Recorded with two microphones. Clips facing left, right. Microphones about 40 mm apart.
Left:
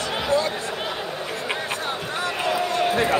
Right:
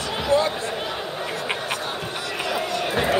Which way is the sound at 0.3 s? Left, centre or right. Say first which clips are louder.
Right 3 dB; right.